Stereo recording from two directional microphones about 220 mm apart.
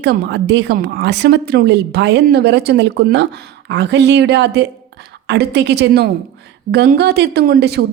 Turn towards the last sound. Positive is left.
turn(degrees=-45)  # may be behind; listen again after turning